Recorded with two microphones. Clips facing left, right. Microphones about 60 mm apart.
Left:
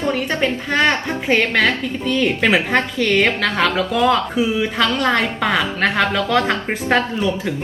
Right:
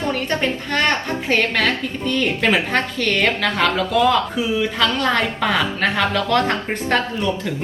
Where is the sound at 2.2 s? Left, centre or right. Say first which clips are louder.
Left 2 dB; centre.